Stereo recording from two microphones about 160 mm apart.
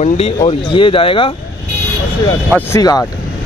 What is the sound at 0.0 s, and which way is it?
Speech, 40° left (ahead or behind).